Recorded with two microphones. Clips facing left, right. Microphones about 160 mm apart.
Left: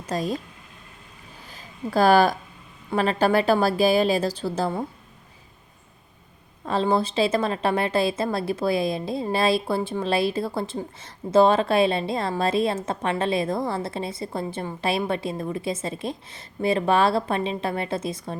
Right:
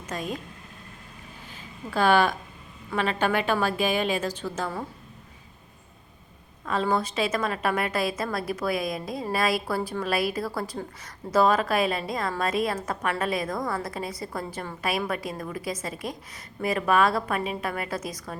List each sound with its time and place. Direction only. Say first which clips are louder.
0.0 s speech: left 6 dB; 35° left (ahead or behind)
1.9 s a woman's voice: left 4 dB; 40° left (ahead or behind)
6.7 s a woman's voice: left 3 dB; 30° left (ahead or behind)